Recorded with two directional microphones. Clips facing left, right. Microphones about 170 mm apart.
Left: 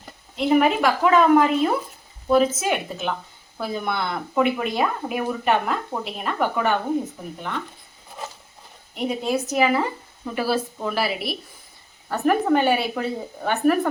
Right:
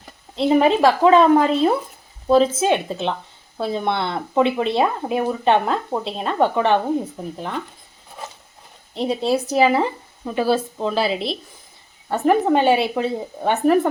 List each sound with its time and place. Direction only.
0.3 s speech: 30° right (ahead or behind)
9.0 s speech: 30° right (ahead or behind)